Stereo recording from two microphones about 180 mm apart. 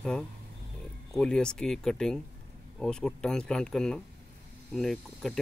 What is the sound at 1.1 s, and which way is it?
Speech, 5° left (ahead or behind).